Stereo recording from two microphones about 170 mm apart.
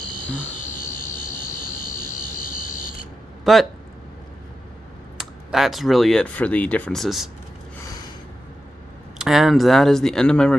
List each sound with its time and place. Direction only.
0.7 s vehicle: 55° left (ahead or behind)
2.0 s a sound: 55° left (ahead or behind)
3.5 s speech: centre (ahead or behind)
5.2 s speech: centre (ahead or behind)
9.2 s speech: centre (ahead or behind)